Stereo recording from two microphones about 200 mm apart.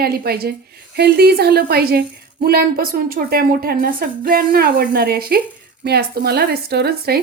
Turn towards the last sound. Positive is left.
turn(degrees=-50)  # may be behind; listen again after turning